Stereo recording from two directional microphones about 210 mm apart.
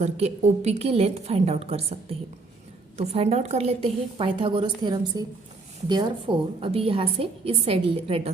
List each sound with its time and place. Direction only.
0.0 s a woman's voice: 30° right (ahead or behind)